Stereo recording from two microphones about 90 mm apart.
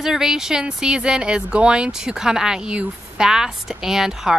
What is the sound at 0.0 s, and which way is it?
Speech, 5° right (ahead or behind).